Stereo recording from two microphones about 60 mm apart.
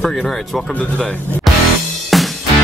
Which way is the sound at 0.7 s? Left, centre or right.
Centre.